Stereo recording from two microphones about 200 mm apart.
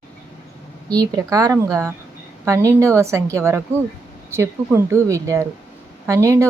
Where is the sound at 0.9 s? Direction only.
20° right (ahead or behind).